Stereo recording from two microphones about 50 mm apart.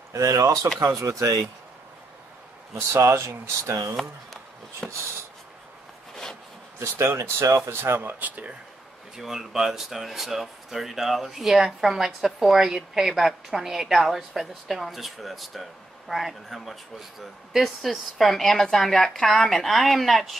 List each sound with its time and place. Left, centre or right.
0.1 s speech: right
0.7 s speech: right
2.7 s speech: right
3.9 s a woman's voice: centre
4.8 s a sound: centre
6.8 s speech: right
7.7 s speech: right
8.0 s speech: right
9.1 s a woman's voice: centre